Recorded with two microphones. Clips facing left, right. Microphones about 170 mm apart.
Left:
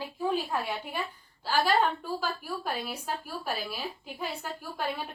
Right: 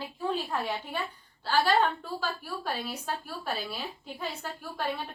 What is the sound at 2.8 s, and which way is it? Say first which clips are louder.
A woman's voice: even; 10° left (ahead or behind).